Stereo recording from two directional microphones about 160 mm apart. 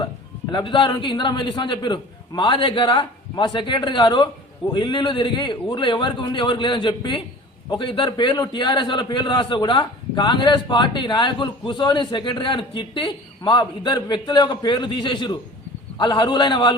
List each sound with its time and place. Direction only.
0.5 s a man's voice: 30° left (ahead or behind)